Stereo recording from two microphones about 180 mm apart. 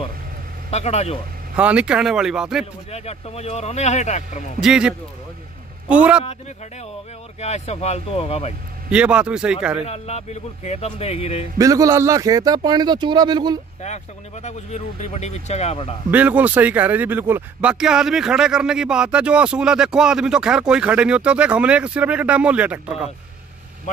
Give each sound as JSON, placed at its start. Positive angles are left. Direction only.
{"t": 0.7, "sound": "speech", "side_deg": 35}
{"t": 1.6, "sound": "speech", "side_deg": -5}
{"t": 2.6, "sound": "speech", "side_deg": 35}
{"t": 4.6, "sound": "speech", "side_deg": -5}
{"t": 7.3, "sound": "speech", "side_deg": 35}
{"t": 8.9, "sound": "speech", "side_deg": -5}
{"t": 9.8, "sound": "speech", "side_deg": 35}
{"t": 11.5, "sound": "a man's voice", "side_deg": -20}
{"t": 13.8, "sound": "speech", "side_deg": 40}
{"t": 16.1, "sound": "speech", "side_deg": -10}